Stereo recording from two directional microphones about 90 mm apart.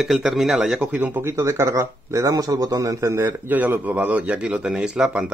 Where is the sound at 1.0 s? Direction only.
20° right (ahead or behind).